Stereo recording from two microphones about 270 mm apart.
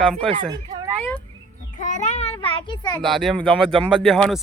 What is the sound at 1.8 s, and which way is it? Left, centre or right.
Goat, left.